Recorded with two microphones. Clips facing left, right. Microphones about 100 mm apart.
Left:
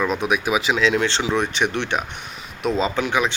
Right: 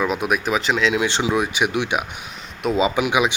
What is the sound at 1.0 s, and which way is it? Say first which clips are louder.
Speech: right 1 dB; 15° right (ahead or behind).